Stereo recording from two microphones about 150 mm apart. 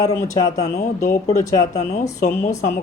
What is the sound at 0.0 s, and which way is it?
Speech, 20° left (ahead or behind).